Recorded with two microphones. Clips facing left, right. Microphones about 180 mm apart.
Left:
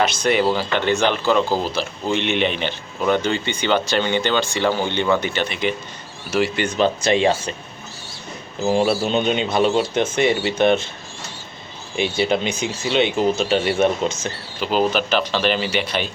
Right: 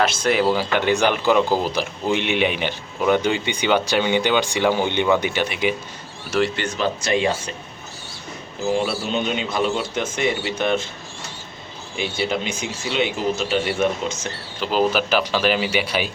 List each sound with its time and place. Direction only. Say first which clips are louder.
0.0 s speech: left 1 dB; 5° right (ahead or behind)
6.6 s speech: left 4 dB; 25° left (ahead or behind)
8.6 s speech: left 4 dB; 30° left (ahead or behind)
11.9 s speech: left 4 dB; 25° left (ahead or behind)
14.6 s speech: even; centre (ahead or behind)